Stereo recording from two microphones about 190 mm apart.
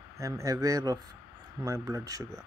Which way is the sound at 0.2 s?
15° right (ahead or behind).